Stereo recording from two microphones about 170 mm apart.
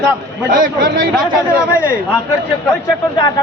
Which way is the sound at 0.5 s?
55° right (ahead or behind).